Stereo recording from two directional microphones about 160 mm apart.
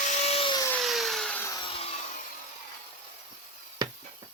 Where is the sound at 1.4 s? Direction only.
20° left (ahead or behind).